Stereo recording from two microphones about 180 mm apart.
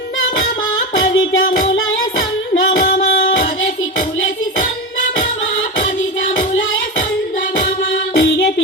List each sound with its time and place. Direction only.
0.9 s music: 90° left
2.5 s music: 50° left (ahead or behind)
8.1 s music: 90° left